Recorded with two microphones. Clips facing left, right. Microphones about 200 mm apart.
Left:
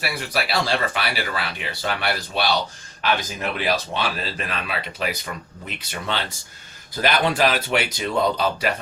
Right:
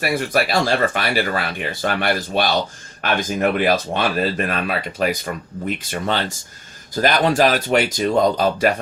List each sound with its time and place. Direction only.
0.0 s speech: 50° right (ahead or behind)